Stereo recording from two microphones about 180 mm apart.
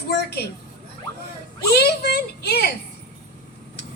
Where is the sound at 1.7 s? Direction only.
65° left (ahead or behind).